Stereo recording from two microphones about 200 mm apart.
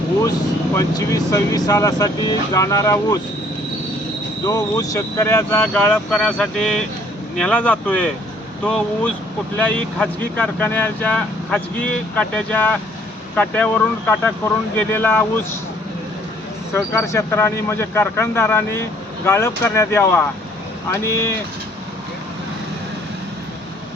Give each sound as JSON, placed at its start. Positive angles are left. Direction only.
{"t": 0.8, "sound": "speech", "side_deg": 15}
{"t": 4.4, "sound": "speech", "side_deg": 20}
{"t": 16.7, "sound": "speech", "side_deg": 15}